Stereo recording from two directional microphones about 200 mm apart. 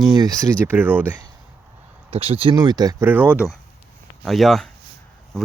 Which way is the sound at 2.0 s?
30° right (ahead or behind).